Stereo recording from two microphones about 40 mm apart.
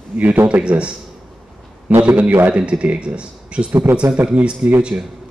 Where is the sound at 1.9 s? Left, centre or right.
Right.